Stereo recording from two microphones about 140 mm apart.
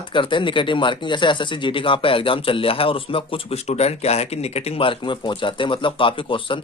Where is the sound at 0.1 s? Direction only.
35° left (ahead or behind).